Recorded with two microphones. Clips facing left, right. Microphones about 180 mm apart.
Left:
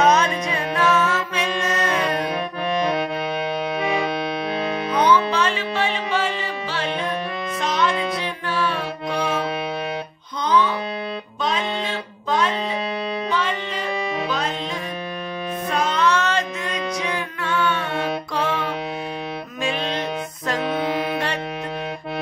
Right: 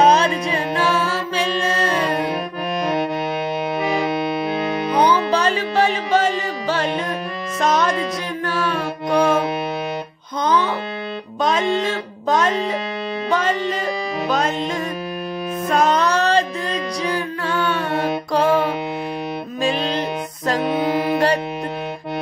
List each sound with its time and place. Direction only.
0.0 s music: 30° right (ahead or behind)
4.9 s music: 35° right (ahead or behind)
8.5 s mantra: 45° right (ahead or behind)
10.4 s music: 45° right (ahead or behind)
15.7 s music: 45° right (ahead or behind)